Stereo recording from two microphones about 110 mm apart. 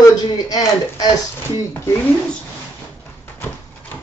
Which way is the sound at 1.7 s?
15° left (ahead or behind).